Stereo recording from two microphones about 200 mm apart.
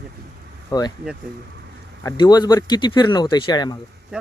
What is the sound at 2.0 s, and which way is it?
Speech, 20° left (ahead or behind).